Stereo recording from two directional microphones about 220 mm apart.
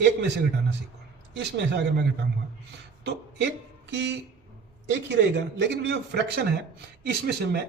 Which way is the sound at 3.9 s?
55° right (ahead or behind).